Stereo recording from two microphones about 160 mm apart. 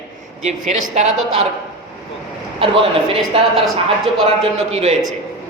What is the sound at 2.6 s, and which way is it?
Speech, 35° right (ahead or behind).